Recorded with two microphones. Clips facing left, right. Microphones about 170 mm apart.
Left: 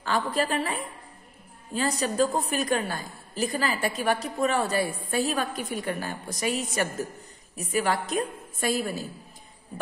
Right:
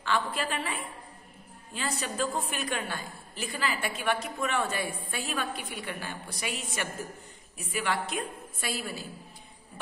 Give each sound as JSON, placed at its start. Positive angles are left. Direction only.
{"t": 0.0, "sound": "a woman's voice", "side_deg": 40}